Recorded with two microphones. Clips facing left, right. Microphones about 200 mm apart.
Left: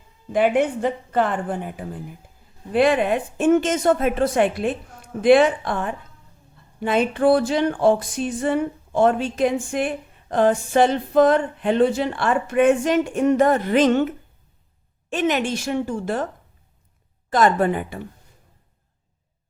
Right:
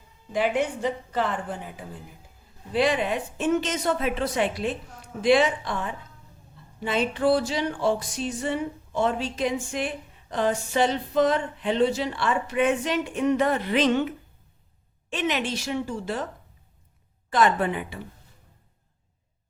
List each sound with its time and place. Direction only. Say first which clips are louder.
0.3 s a woman's voice: left 6 dB; 55° left (ahead or behind)
2.7 s music: left 6 dB; 55° left (ahead or behind)
15.1 s music: left 6 dB; 45° left (ahead or behind)
17.2 s music: left 4 dB; 40° left (ahead or behind)